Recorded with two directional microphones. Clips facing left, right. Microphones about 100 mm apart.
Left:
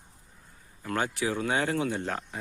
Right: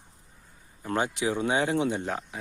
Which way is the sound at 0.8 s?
20° right (ahead or behind).